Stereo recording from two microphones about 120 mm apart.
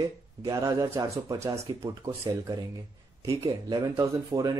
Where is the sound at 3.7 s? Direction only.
30° right (ahead or behind).